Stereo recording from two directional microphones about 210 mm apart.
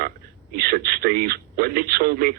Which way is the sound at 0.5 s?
45° right (ahead or behind).